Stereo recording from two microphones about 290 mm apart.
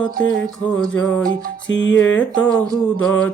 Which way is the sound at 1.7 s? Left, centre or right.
Left.